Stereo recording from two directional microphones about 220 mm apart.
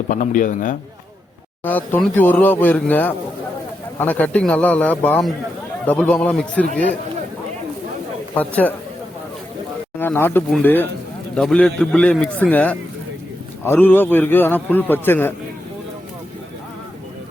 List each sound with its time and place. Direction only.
0.1 s a man's voice: 35° left (ahead or behind)
1.6 s a man's voice: 10° left (ahead or behind)
8.4 s a man's voice: 5° left (ahead or behind)
10.0 s a man's voice: 10° left (ahead or behind)